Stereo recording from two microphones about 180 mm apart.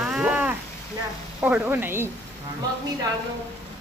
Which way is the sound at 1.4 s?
10° right (ahead or behind).